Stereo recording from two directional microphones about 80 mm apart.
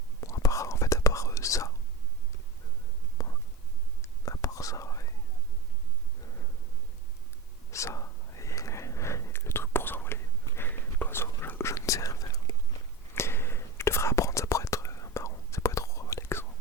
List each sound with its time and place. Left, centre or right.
0.2 s whispering: left
3.2 s whispering: left
7.7 s whispering: left
13.1 s whispering: left